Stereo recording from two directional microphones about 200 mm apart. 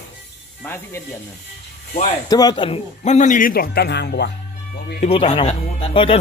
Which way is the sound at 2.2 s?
20° left (ahead or behind).